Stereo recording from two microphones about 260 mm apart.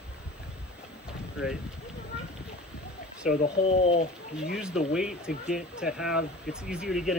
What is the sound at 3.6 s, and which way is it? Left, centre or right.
Speech, left.